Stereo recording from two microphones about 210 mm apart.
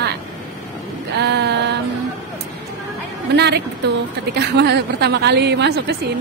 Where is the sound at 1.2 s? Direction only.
55° right (ahead or behind).